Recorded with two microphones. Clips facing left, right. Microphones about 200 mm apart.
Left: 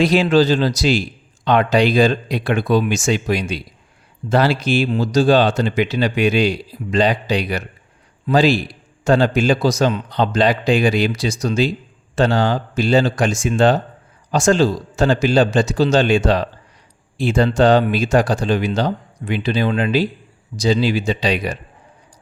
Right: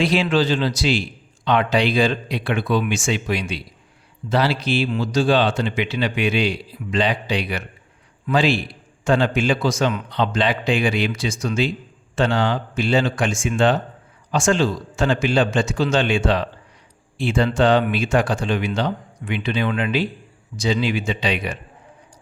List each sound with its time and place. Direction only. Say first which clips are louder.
0.0 s a man's voice: left 5 dB; 40° left (ahead or behind)